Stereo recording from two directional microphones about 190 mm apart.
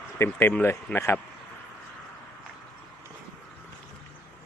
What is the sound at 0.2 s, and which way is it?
Speech, 10° left (ahead or behind).